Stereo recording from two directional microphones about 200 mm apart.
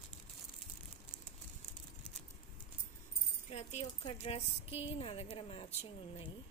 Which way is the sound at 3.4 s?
35° left (ahead or behind).